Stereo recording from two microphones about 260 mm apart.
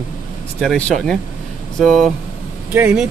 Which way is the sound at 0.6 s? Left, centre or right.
Centre.